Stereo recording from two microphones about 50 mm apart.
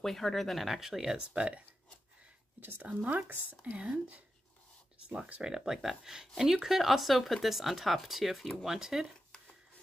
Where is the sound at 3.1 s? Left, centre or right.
Right.